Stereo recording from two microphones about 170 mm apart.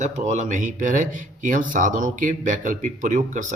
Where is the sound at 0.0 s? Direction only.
45° right (ahead or behind).